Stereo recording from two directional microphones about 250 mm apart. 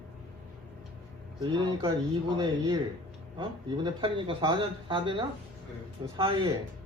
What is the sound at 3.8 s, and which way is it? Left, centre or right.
Speech, centre.